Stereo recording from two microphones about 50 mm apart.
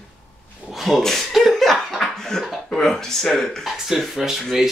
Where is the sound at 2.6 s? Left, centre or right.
Centre.